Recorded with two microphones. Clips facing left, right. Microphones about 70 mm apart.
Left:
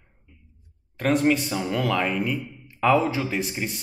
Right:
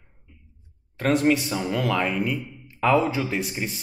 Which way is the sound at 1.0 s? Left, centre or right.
Centre.